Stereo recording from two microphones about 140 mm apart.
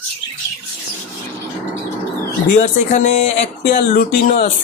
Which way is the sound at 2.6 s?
60° left (ahead or behind).